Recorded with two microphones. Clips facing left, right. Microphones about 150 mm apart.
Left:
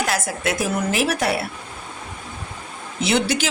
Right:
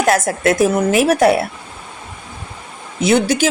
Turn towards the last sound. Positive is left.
turn(degrees=-45)  # may be behind; listen again after turning